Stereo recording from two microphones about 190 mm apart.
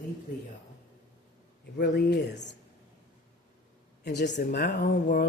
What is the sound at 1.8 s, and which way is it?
Speech, 60° left (ahead or behind).